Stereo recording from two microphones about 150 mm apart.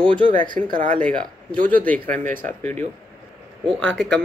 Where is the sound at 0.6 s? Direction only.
50° right (ahead or behind).